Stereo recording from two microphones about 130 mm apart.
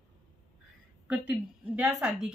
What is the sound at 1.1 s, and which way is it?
A woman's voice, 10° right (ahead or behind).